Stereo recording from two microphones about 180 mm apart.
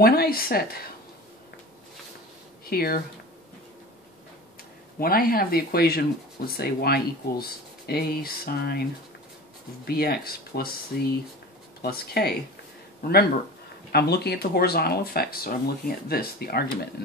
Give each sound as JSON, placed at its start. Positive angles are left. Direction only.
{"t": 0.0, "sound": "speech", "side_deg": 60}
{"t": 2.6, "sound": "speech", "side_deg": 55}
{"t": 4.9, "sound": "speech", "side_deg": 55}
{"t": 9.8, "sound": "speech", "side_deg": 60}
{"t": 13.9, "sound": "speech", "side_deg": 60}